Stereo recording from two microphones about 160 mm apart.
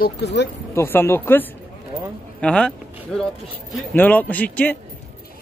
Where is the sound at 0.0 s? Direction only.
90° left.